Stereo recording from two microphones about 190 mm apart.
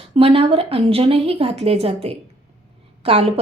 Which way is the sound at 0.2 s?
30° right (ahead or behind).